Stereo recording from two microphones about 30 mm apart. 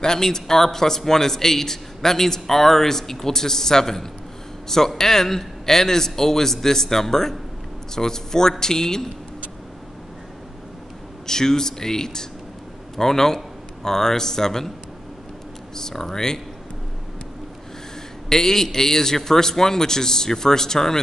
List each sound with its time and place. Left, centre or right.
0.0 s a man's voice: centre
11.2 s a man's voice: centre
15.7 s speech: centre
18.3 s a man's voice: centre